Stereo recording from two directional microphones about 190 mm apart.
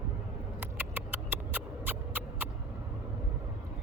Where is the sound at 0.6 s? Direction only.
10° right (ahead or behind).